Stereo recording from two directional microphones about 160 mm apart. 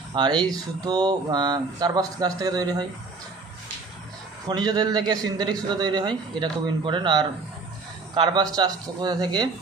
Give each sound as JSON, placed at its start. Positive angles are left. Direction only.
{"t": 0.1, "sound": "speech", "side_deg": -25}
{"t": 4.4, "sound": "speech", "side_deg": -25}